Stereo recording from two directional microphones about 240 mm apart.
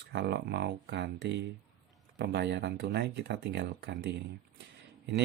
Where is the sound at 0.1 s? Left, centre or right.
Right.